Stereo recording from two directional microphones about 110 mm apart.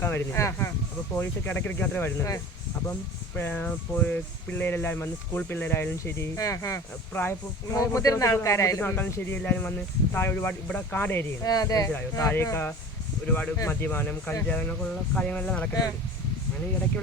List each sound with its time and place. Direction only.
0.0 s speech: 20° left (ahead or behind)
3.3 s speech: 15° left (ahead or behind)
11.4 s speech: 35° left (ahead or behind)
12.3 s speech: 20° left (ahead or behind)